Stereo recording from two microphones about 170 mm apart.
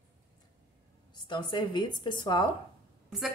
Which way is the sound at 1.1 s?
25° left (ahead or behind).